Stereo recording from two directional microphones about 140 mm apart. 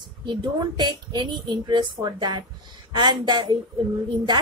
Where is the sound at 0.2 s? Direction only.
35° right (ahead or behind).